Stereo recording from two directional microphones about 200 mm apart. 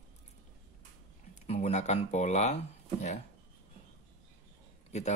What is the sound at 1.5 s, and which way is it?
Speech, 35° left (ahead or behind).